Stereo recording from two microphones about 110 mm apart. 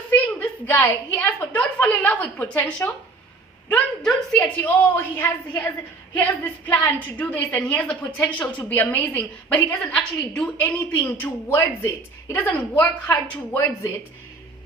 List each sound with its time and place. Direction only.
0.1 s a woman's voice: 20° left (ahead or behind)
4.0 s a woman's voice: 10° left (ahead or behind)
10.6 s a woman's voice: 20° left (ahead or behind)